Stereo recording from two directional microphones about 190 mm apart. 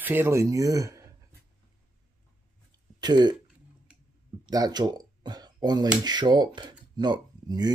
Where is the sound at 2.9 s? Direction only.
20° right (ahead or behind).